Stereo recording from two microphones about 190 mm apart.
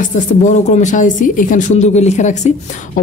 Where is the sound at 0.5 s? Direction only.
40° left (ahead or behind).